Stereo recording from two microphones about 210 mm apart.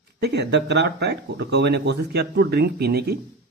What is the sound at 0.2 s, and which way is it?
Speech, 55° right (ahead or behind).